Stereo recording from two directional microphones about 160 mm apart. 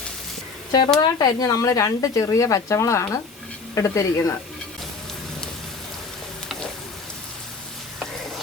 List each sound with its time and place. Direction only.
0.9 s speech: 25° left (ahead or behind)